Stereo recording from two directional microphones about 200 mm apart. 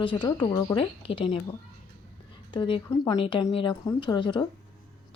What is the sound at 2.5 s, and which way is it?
A woman's voice, 25° left (ahead or behind).